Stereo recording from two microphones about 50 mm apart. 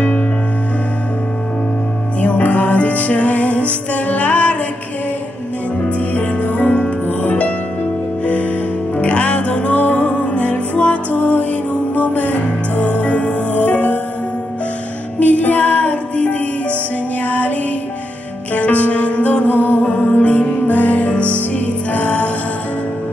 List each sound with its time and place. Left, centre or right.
2.2 s music: left
5.9 s music: left
8.9 s music: left
15.1 s music: left
18.5 s music: left